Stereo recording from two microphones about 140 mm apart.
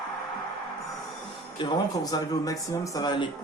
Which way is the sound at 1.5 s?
30° left (ahead or behind).